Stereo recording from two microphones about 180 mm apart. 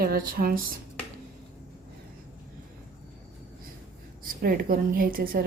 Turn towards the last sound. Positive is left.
turn(degrees=-55)  # may be behind; listen again after turning